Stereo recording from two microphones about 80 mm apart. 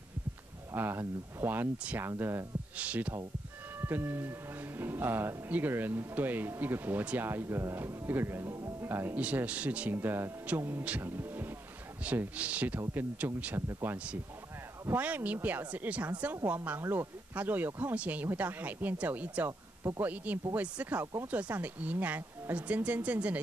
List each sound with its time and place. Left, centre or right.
0.7 s speech: right
2.8 s speech: centre
9.2 s speech: centre
12.0 s speech: centre
13.6 s speech: right
15.0 s speech: centre